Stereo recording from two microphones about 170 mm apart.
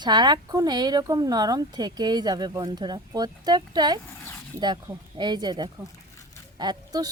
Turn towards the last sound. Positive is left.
turn(degrees=-25)  # may be behind; listen again after turning